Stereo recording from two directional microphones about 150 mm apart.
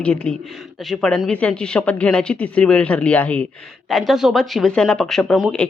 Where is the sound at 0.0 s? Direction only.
10° left (ahead or behind).